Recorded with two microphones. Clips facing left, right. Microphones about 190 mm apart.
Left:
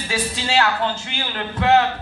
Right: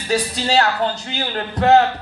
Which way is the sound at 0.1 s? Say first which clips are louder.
Right 4 dB; 40° right (ahead or behind).